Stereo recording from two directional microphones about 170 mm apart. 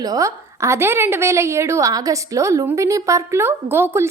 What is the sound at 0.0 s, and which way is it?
A woman's voice, 20° right (ahead or behind).